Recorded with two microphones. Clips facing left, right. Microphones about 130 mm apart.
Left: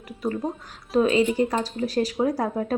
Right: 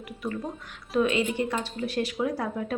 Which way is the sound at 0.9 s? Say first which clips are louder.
Left 5 dB; 35° left (ahead or behind).